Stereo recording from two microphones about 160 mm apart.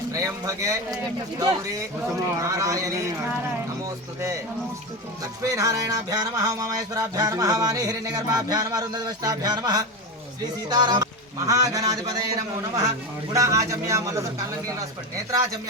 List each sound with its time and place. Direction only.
0.1 s music: 20° right (ahead or behind)
5.4 s music: 20° right (ahead or behind)